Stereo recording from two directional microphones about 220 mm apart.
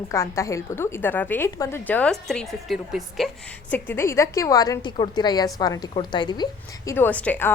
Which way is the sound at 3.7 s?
10° left (ahead or behind).